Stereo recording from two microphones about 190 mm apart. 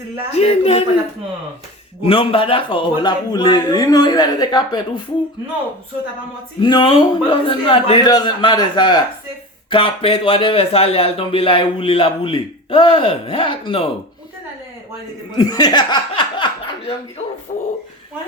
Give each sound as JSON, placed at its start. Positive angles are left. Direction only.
{"t": 0.3, "sound": "speech", "side_deg": 35}
{"t": 2.0, "sound": "speech", "side_deg": 30}
{"t": 6.6, "sound": "speech", "side_deg": 25}
{"t": 15.4, "sound": "speech", "side_deg": 20}